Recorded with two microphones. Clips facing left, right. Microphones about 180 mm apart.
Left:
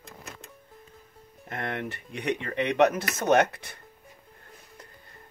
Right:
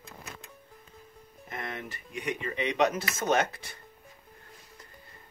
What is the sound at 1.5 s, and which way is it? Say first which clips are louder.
Speech: left 5 dB; 65° left (ahead or behind).